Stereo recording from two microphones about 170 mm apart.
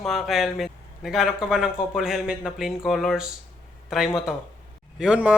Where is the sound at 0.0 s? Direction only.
Centre (ahead or behind).